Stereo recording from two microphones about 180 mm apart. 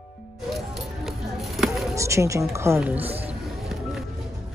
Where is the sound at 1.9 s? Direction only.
15° right (ahead or behind).